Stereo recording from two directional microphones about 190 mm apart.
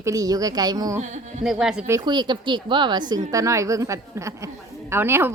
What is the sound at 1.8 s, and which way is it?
A woman's voice, 20° right (ahead or behind).